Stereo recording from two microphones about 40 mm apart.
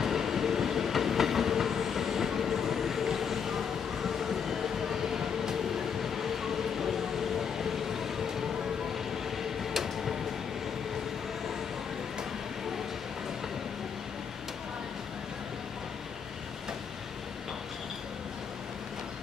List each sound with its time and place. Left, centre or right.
0.0 s train: centre
7.5 s vehicle: centre
8.9 s train: centre